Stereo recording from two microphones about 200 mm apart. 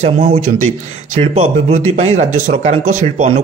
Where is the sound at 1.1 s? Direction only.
30° right (ahead or behind).